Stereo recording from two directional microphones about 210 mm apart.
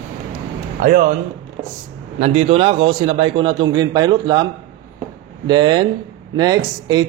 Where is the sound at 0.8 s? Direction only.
40° right (ahead or behind).